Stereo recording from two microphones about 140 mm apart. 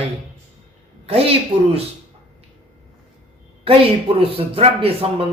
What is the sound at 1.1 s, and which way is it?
Speech, 45° right (ahead or behind).